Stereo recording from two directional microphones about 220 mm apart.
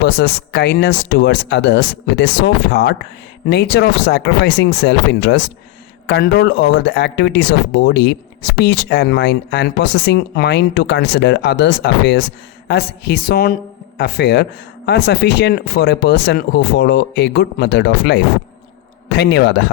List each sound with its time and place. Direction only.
0.0 s speech: 50° left (ahead or behind)